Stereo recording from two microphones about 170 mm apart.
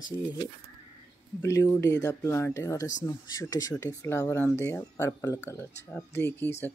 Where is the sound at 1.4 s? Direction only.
20° left (ahead or behind).